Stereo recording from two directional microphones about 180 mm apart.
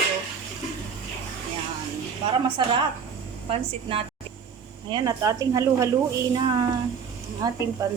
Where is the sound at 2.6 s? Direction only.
25° right (ahead or behind).